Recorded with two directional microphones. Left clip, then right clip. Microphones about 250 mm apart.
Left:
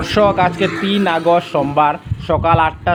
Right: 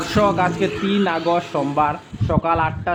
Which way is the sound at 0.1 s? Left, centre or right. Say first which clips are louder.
Left 5 dB; centre.